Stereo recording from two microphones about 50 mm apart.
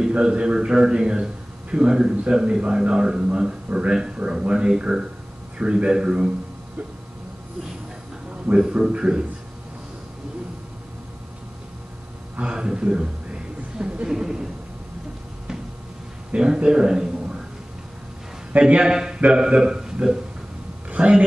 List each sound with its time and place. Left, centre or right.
0.1 s a man's voice: centre
8.5 s a man's voice: centre
12.4 s speech: centre
16.3 s a man's voice: centre
18.7 s a man's voice: centre